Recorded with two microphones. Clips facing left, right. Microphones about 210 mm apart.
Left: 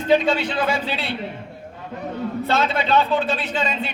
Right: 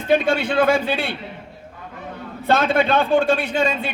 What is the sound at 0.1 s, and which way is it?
A man's voice, 55° right (ahead or behind).